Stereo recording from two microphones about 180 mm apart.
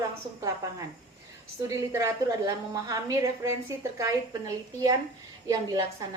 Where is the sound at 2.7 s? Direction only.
20° right (ahead or behind).